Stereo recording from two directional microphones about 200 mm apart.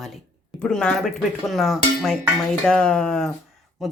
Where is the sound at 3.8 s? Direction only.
Centre (ahead or behind).